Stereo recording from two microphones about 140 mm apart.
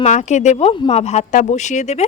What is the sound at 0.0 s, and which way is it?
Speech, 55° left (ahead or behind).